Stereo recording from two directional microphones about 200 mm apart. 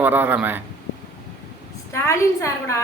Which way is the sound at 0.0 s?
10° right (ahead or behind).